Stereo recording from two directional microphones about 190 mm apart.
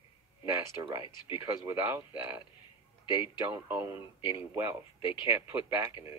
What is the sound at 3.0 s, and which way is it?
Speech, 25° left (ahead or behind).